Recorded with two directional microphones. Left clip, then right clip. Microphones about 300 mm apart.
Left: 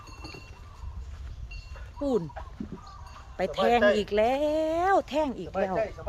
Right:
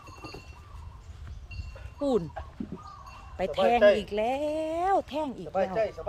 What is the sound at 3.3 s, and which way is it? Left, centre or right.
Speech, centre.